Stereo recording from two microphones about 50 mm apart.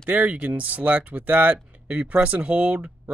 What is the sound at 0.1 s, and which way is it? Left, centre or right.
Speech, right.